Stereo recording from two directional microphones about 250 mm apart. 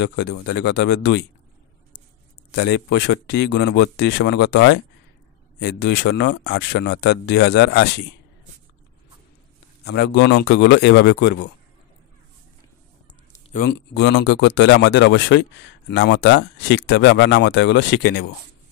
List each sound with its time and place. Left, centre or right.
0.0 s speech: left
2.5 s speech: left
9.9 s speech: left
13.5 s speech: left